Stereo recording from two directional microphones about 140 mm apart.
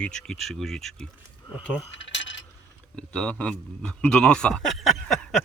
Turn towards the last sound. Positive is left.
turn(degrees=5)  # may be behind; listen again after turning